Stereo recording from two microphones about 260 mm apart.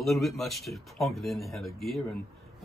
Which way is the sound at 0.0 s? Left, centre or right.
Centre.